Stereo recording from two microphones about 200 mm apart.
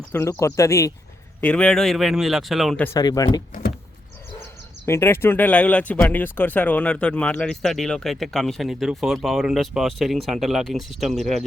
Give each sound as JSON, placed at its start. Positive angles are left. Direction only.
{"t": 0.1, "sound": "speech", "side_deg": 15}
{"t": 2.8, "sound": "speech", "side_deg": 15}
{"t": 4.9, "sound": "speech", "side_deg": 10}